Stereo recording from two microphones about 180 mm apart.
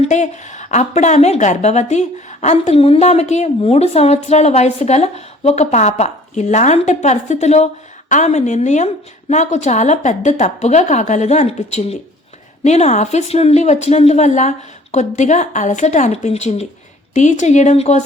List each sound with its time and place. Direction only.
0.0 s a woman's voice: 40° left (ahead or behind)